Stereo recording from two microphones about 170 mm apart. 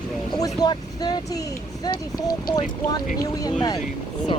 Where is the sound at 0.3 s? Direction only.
20° left (ahead or behind).